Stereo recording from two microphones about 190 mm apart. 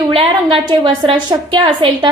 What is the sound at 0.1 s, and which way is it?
A woman's voice, 25° right (ahead or behind).